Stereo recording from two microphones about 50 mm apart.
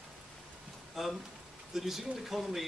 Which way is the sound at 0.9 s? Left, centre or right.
Centre.